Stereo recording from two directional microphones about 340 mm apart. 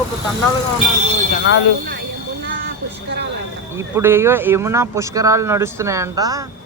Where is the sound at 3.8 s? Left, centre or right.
Centre.